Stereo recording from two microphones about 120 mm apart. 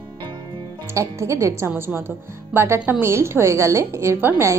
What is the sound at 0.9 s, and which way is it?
A woman's voice, 25° right (ahead or behind).